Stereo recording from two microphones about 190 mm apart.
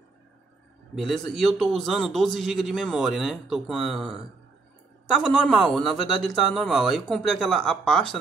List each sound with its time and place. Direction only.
0.9 s a man's voice: centre (ahead or behind)